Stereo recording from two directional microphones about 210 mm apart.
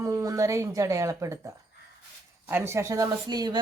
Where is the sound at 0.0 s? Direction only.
15° right (ahead or behind).